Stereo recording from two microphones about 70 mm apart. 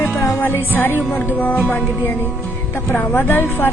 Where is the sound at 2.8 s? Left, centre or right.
Left.